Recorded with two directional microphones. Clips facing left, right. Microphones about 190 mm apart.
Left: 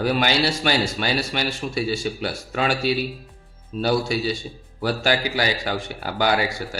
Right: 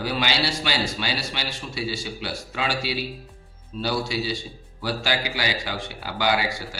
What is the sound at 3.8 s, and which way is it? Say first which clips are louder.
A man's voice: left 5 dB; 50° left (ahead or behind).